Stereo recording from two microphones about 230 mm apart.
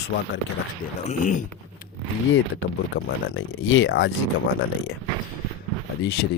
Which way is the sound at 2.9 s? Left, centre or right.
Left.